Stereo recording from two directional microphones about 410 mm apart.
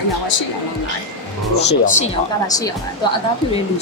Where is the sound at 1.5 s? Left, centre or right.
Left.